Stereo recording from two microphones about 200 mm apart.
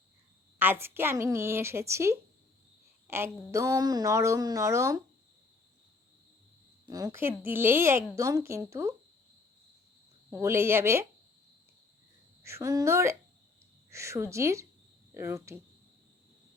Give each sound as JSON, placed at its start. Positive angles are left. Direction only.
{"t": 0.6, "sound": "a woman's voice", "side_deg": -10}
{"t": 6.8, "sound": "a woman's voice", "side_deg": -15}
{"t": 10.2, "sound": "a woman's voice", "side_deg": -15}
{"t": 12.4, "sound": "a woman's voice", "side_deg": -15}